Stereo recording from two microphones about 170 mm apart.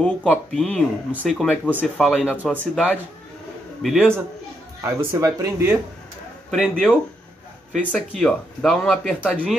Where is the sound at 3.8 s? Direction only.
Centre (ahead or behind).